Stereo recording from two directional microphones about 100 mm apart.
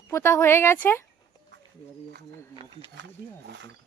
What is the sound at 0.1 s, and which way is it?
Speech, 25° left (ahead or behind).